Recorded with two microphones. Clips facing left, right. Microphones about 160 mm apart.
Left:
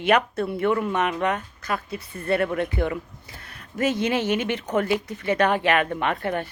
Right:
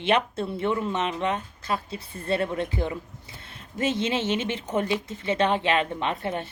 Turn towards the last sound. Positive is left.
turn(degrees=60)  # may be behind; listen again after turning